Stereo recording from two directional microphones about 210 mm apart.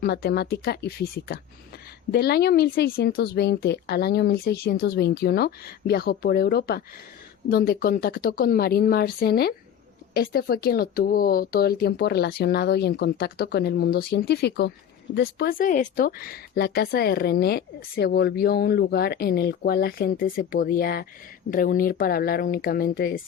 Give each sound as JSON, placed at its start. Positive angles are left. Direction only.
{"t": 0.0, "sound": "speech", "side_deg": 50}